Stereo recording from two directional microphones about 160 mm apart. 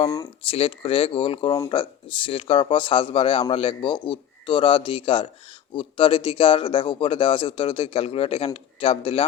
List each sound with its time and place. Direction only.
0.0 s speech: 25° left (ahead or behind)
0.4 s a man's voice: 35° left (ahead or behind)